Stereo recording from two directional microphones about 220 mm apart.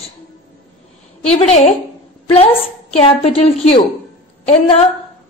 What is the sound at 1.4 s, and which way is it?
A woman's voice, 30° left (ahead or behind).